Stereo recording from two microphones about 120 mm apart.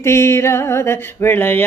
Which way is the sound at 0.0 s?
25° left (ahead or behind).